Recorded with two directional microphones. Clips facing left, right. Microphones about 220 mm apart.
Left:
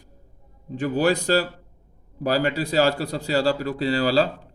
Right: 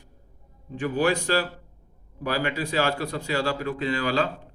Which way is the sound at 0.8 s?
40° left (ahead or behind).